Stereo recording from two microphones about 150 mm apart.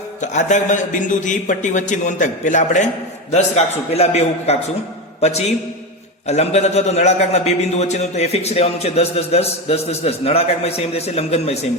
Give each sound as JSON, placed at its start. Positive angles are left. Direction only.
{"t": 0.2, "sound": "a man's voice", "side_deg": 55}
{"t": 3.3, "sound": "a man's voice", "side_deg": 45}